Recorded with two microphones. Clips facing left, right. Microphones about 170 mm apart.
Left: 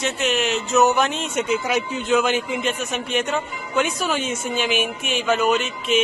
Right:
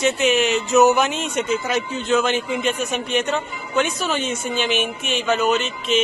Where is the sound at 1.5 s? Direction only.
10° left (ahead or behind).